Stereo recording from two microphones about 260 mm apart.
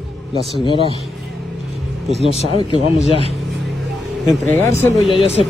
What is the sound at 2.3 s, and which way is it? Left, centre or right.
Speech, left.